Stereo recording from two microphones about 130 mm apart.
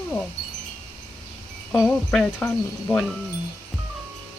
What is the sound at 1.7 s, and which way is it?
Speech, centre (ahead or behind).